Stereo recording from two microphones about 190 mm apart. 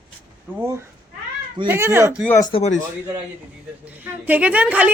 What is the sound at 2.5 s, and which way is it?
Speech, 35° left (ahead or behind).